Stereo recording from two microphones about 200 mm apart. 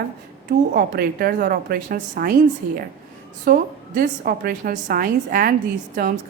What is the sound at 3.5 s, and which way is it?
A woman's voice, 50° right (ahead or behind).